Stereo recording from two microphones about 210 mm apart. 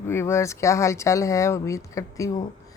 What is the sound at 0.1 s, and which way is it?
Speech, 10° left (ahead or behind).